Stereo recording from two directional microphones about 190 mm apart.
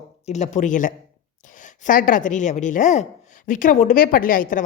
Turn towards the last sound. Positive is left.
turn(degrees=45)  # may be behind; listen again after turning